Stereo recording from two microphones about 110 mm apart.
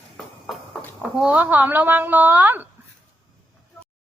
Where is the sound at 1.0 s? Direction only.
10° right (ahead or behind).